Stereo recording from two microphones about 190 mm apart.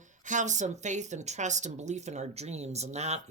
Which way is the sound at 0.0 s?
40° right (ahead or behind).